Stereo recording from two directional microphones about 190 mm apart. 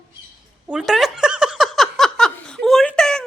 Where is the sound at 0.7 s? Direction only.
Centre (ahead or behind).